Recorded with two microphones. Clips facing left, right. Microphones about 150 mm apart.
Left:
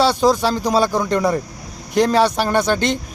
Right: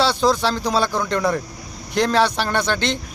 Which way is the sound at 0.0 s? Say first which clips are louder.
Left 3 dB; 45° left (ahead or behind).